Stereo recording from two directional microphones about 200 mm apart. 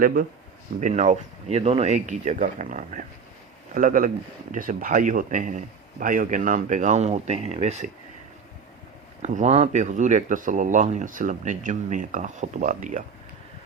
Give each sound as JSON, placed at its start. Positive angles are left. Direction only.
{"t": 0.0, "sound": "speech", "side_deg": -45}
{"t": 9.2, "sound": "speech", "side_deg": -35}